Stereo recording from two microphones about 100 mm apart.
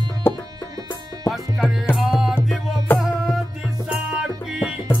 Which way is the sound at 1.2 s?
Centre (ahead or behind).